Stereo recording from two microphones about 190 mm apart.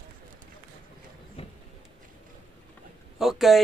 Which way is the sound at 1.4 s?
30° left (ahead or behind).